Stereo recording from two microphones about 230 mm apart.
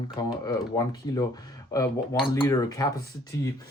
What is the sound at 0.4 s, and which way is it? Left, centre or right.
Speech, centre.